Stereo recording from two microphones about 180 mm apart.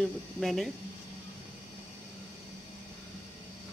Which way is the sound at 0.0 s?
Centre (ahead or behind).